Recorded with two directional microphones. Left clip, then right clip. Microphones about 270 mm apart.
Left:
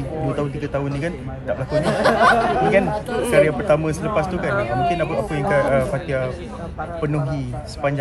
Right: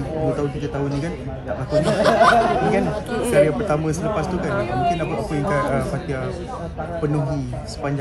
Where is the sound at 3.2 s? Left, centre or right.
Left.